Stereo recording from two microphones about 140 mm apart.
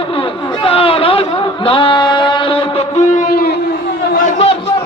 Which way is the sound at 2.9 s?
60° left (ahead or behind).